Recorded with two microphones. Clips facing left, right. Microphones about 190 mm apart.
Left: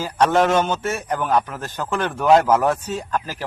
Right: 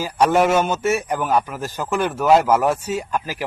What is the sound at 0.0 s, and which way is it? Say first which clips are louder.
A man's voice: right 1 dB; 10° right (ahead or behind).